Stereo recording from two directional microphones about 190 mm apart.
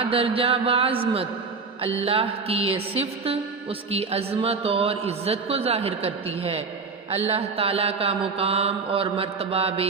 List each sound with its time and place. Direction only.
0.0 s a man's voice: 30° right (ahead or behind)